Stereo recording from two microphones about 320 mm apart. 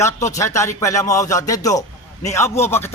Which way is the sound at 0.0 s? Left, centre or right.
Centre.